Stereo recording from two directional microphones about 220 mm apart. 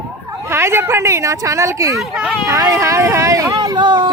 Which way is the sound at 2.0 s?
5° right (ahead or behind).